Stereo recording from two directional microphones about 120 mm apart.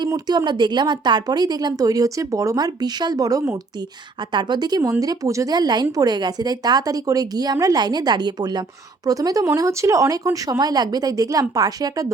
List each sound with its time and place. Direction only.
0.0 s a woman's voice: 35° right (ahead or behind)
4.2 s a woman's voice: 40° right (ahead or behind)